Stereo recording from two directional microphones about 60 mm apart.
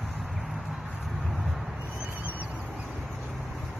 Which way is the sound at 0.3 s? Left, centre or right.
Centre.